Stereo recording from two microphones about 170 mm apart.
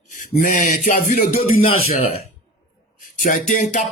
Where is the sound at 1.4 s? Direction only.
35° left (ahead or behind).